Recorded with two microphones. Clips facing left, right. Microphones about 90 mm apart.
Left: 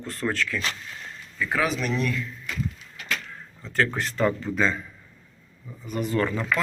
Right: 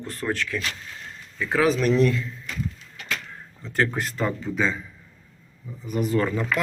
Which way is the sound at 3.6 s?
20° right (ahead or behind).